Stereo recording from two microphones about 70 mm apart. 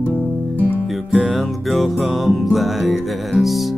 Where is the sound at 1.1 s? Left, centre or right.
Centre.